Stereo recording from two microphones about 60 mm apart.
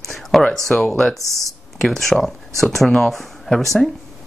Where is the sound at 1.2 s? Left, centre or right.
Right.